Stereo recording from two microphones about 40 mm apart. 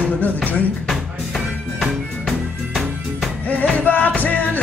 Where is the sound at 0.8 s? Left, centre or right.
Centre.